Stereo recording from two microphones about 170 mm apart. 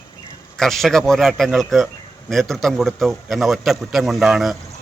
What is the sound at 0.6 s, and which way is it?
A man's voice, centre (ahead or behind).